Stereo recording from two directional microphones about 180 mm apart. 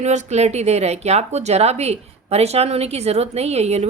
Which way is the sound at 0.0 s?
40° right (ahead or behind).